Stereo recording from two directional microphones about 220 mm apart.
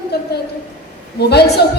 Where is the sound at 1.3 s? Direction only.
45° left (ahead or behind).